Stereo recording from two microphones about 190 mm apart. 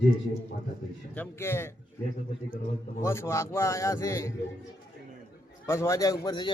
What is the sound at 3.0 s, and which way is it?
A man's voice, 15° left (ahead or behind).